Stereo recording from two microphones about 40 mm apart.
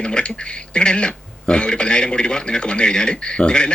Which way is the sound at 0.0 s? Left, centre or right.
Left.